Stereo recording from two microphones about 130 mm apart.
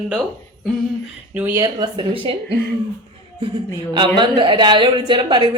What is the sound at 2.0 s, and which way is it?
Speech, 45° right (ahead or behind).